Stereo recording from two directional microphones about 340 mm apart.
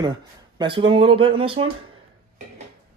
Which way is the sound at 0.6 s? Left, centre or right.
Centre.